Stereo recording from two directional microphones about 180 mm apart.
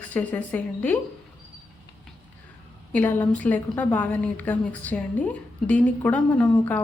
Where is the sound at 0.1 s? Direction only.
10° left (ahead or behind).